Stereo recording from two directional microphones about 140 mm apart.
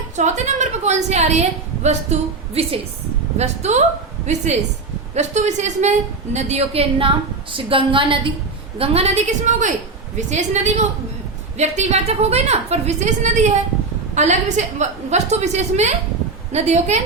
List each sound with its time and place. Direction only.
0.2 s a woman's voice: 55° right (ahead or behind)